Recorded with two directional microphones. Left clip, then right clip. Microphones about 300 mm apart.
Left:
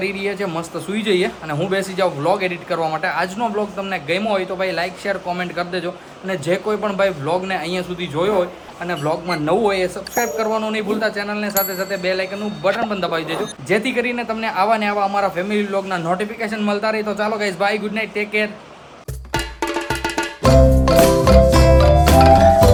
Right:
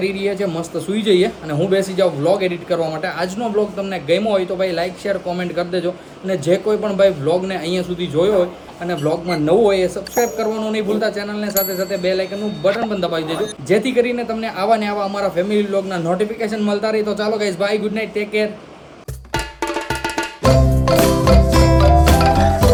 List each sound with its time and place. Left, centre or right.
0.0 s a man's voice: centre
19.3 s music: centre